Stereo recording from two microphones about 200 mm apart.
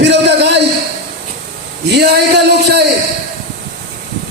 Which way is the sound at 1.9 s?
55° right (ahead or behind).